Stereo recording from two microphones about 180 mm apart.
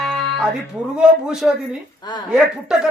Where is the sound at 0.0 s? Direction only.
Centre (ahead or behind).